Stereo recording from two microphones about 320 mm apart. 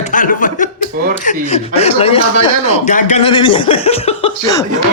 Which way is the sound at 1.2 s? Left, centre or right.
Left.